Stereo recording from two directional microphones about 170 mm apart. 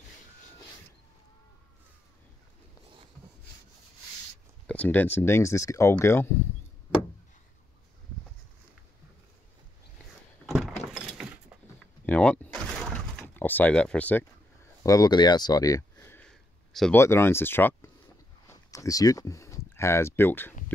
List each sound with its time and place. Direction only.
4.6 s speech: 10° left (ahead or behind)
10.4 s door: centre (ahead or behind)
12.1 s door: 10° left (ahead or behind)
14.8 s a sound: 20° left (ahead or behind); by 16.9 s 5° left (ahead or behind)
16.9 s speech: 15° left (ahead or behind)